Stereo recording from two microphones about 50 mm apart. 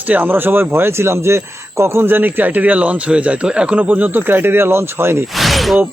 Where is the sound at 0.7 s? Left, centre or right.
Right.